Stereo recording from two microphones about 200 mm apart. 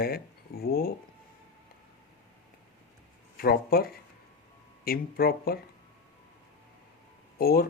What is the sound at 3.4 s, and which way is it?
Speech, 50° left (ahead or behind).